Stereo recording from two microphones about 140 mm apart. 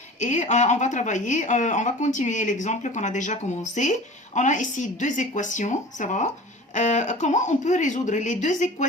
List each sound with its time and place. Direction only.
0.2 s speech: 60° left (ahead or behind)